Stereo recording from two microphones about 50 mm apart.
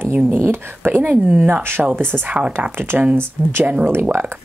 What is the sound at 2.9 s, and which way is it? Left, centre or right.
Speech, right.